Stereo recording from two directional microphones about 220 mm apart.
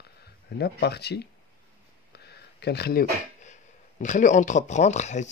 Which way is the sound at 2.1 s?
50° left (ahead or behind).